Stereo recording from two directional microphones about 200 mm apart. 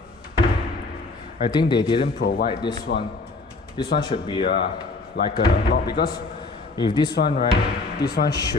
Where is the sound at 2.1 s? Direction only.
50° left (ahead or behind).